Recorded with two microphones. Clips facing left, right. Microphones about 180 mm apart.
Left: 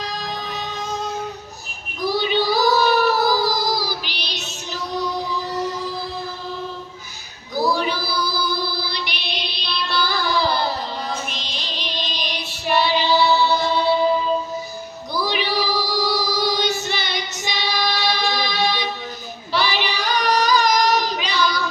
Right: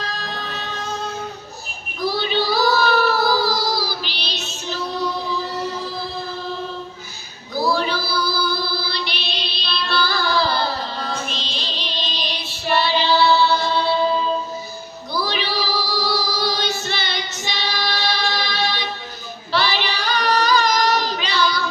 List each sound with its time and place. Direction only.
0.0 s music: 15° left (ahead or behind)
2.0 s child singing: 15° left (ahead or behind)
7.5 s child singing: 20° left (ahead or behind)
15.1 s female singing: 15° left (ahead or behind)
19.5 s child singing: 15° left (ahead or behind)